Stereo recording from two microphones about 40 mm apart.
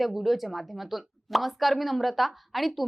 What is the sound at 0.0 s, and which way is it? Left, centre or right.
A woman's voice, centre.